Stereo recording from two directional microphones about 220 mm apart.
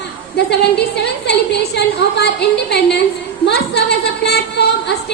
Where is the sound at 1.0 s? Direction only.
50° left (ahead or behind).